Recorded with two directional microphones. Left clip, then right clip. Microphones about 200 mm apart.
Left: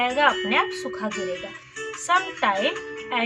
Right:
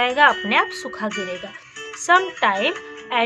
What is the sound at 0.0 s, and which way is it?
Speech, 60° right (ahead or behind).